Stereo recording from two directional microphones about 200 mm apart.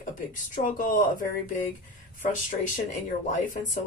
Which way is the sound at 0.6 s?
45° left (ahead or behind).